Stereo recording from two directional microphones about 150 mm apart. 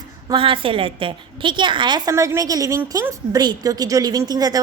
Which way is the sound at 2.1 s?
20° right (ahead or behind).